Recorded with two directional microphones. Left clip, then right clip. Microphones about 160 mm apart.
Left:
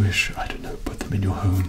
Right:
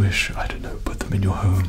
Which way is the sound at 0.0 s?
60° right (ahead or behind).